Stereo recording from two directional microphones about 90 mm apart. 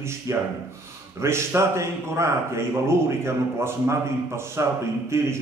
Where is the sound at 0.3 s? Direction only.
35° right (ahead or behind).